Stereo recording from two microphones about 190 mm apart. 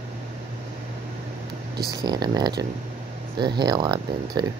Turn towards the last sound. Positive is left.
turn(degrees=-20)  # may be behind; listen again after turning